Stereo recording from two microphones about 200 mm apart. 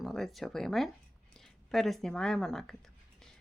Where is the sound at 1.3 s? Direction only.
Centre (ahead or behind).